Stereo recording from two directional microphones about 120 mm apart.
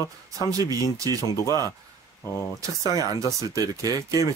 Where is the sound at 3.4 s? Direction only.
30° right (ahead or behind).